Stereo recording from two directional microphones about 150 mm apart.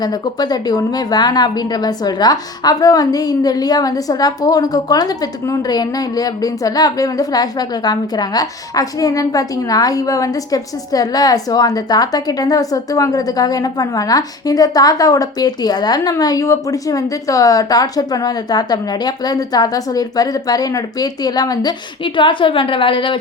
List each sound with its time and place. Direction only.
0.0 s a woman's voice: 25° left (ahead or behind)